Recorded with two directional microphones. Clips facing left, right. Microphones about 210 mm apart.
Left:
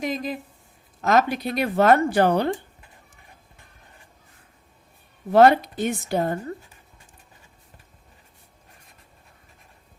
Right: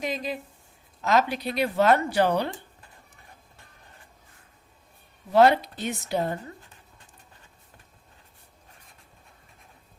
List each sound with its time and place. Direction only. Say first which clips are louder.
0.0 s speech: left 3 dB; 50° left (ahead or behind)
5.3 s speech: left 3 dB; 50° left (ahead or behind)